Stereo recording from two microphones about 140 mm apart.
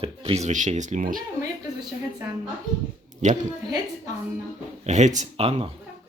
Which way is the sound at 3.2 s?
60° right (ahead or behind).